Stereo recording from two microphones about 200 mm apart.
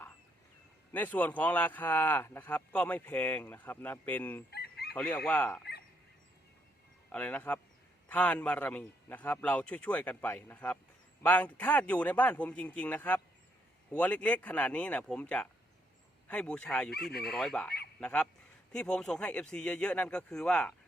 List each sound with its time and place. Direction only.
0.9 s a man's voice: 10° left (ahead or behind)
4.5 s chicken: 55° left (ahead or behind)
4.9 s a man's voice: 5° left (ahead or behind)
7.1 s a man's voice: 5° left (ahead or behind)
17.1 s speech: 50° left (ahead or behind)
17.3 s speech: centre (ahead or behind)